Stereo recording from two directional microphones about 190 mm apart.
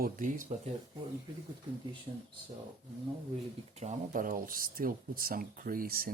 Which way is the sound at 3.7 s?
35° right (ahead or behind).